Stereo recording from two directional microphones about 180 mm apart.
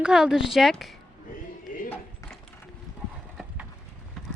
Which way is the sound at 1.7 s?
50° left (ahead or behind).